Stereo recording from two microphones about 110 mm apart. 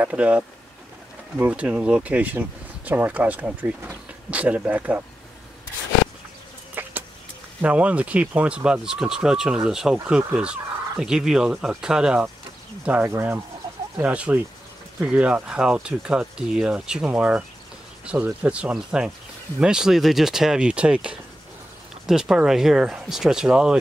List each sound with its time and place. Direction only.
0.0 s speech: 10° right (ahead or behind)
6.7 s vehicle: 15° right (ahead or behind)
7.6 s speech: 15° right (ahead or behind)